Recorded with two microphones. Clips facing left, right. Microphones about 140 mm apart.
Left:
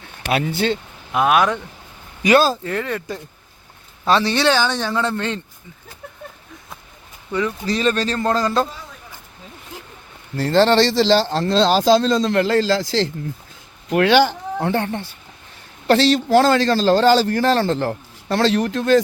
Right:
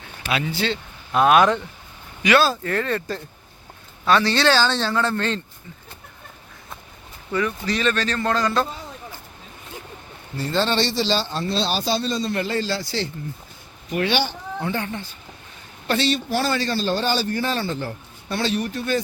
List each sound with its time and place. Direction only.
0.3 s speech: 50° left (ahead or behind)
1.2 s speech: centre (ahead or behind)
2.2 s speech: 40° left (ahead or behind)
2.6 s a man's voice: 15° left (ahead or behind)
7.7 s speech: 35° left (ahead or behind)
10.3 s a man's voice: 85° left
14.6 s speech: 60° left (ahead or behind)
15.9 s a man's voice: 90° left